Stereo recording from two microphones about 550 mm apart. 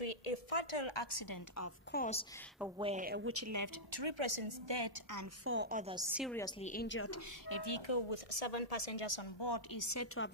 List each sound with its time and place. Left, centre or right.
0.0 s a woman's voice: left
1.9 s a woman's voice: centre
2.6 s a woman's voice: centre; by 3.7 s right
3.9 s a woman's voice: right
5.1 s a woman's voice: right; by 7.2 s left
7.4 s speech: left